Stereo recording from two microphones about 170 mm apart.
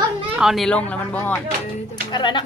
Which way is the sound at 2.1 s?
25° left (ahead or behind).